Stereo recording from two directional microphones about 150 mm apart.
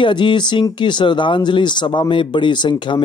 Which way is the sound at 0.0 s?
30° left (ahead or behind).